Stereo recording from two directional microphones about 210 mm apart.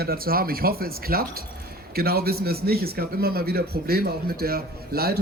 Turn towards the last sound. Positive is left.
turn(degrees=-50)  # may be behind; listen again after turning